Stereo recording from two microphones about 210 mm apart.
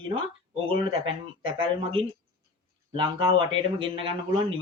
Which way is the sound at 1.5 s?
25° right (ahead or behind).